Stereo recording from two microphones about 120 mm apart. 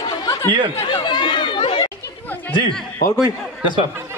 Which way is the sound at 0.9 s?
40° left (ahead or behind).